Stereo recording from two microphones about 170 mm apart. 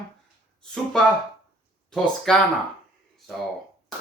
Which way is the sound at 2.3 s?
Centre (ahead or behind).